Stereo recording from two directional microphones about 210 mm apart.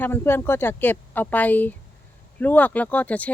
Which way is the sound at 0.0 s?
10° left (ahead or behind).